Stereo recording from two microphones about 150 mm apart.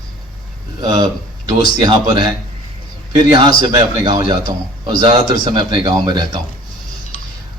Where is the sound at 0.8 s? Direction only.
25° right (ahead or behind).